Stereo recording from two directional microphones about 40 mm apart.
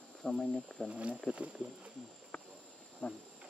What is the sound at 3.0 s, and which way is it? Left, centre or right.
Speech, left.